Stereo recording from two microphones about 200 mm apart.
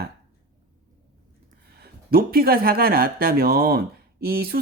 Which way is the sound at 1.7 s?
50° right (ahead or behind).